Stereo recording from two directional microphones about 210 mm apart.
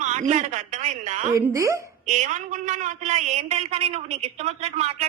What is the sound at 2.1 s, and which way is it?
A man's voice, 35° right (ahead or behind).